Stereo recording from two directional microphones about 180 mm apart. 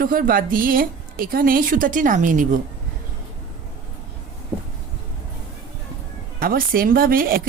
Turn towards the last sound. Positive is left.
turn(degrees=-55)  # may be behind; listen again after turning